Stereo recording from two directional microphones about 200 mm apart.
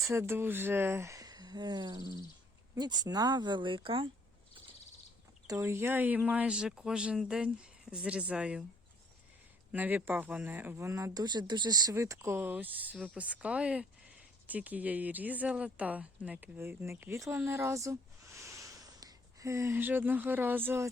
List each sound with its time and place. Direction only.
0.1 s speech: 10° right (ahead or behind)
5.5 s speech: 15° right (ahead or behind)
9.7 s speech: 10° right (ahead or behind)